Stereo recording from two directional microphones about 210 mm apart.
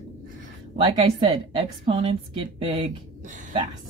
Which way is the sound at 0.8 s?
20° right (ahead or behind).